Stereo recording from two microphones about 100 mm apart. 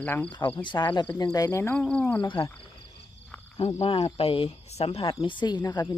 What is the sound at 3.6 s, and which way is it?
Speech, 85° left.